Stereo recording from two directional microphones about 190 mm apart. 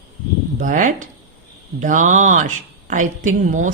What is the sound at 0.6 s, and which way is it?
A woman's voice, 45° right (ahead or behind).